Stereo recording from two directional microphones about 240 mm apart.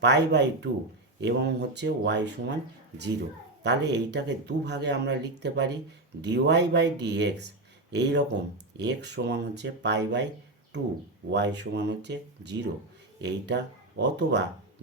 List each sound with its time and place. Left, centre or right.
0.0 s speech: right
3.6 s speech: right
11.3 s speech: right